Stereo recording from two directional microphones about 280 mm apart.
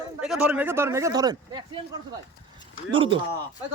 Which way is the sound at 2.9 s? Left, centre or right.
Centre.